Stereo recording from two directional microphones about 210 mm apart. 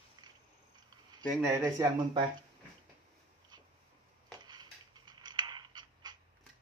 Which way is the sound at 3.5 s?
20° right (ahead or behind).